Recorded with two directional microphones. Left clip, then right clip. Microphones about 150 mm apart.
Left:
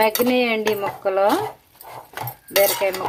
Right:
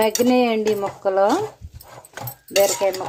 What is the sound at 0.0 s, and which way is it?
Cutlery, 15° right (ahead or behind).